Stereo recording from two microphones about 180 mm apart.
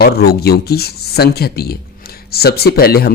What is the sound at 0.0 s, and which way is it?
Speech, 60° left (ahead or behind).